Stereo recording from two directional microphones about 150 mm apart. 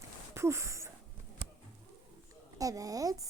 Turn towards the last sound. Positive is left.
turn(degrees=-25)  # may be behind; listen again after turning